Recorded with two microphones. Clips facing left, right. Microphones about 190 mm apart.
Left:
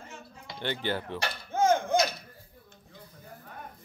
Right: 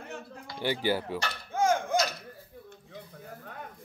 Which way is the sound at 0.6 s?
10° right (ahead or behind).